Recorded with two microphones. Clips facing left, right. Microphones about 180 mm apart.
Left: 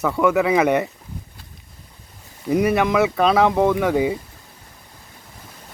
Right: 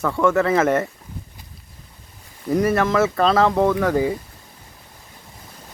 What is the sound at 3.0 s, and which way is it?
Speech, 5° left (ahead or behind).